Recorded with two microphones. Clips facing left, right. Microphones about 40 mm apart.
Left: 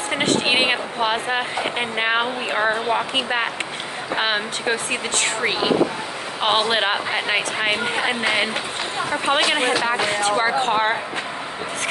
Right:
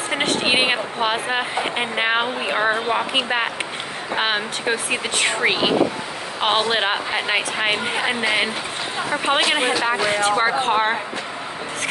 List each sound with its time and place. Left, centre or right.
0.1 s a woman's voice: centre
4.9 s a woman's voice: centre
6.4 s speech: centre